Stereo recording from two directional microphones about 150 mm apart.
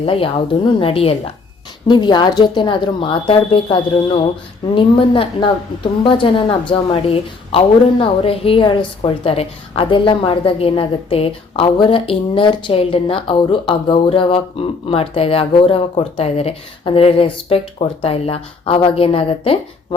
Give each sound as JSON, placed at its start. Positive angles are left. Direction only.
{"t": 0.0, "sound": "a woman's voice", "side_deg": 40}
{"t": 1.9, "sound": "a woman's voice", "side_deg": 30}